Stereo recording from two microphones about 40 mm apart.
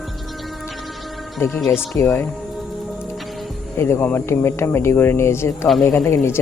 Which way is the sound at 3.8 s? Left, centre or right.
Left.